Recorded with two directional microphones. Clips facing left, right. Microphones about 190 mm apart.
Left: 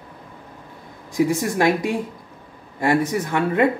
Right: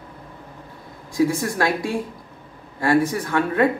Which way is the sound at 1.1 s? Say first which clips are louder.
Left 1 dB; 20° left (ahead or behind).